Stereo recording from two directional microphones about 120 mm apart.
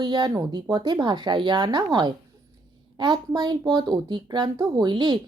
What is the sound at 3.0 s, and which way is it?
Speech, 40° right (ahead or behind).